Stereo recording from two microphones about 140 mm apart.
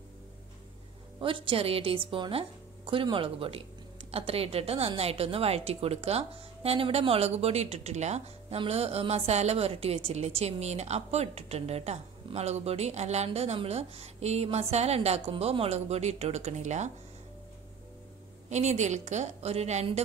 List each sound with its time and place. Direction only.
1.2 s a woman's voice: 40° right (ahead or behind); by 16.9 s 55° right (ahead or behind)
18.5 s a woman's voice: 55° right (ahead or behind)